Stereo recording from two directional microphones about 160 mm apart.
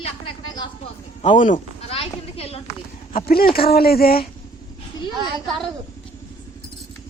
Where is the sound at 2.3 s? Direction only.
40° left (ahead or behind).